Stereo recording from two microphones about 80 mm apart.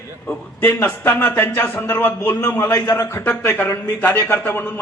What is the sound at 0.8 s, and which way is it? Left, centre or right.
A man's voice, left.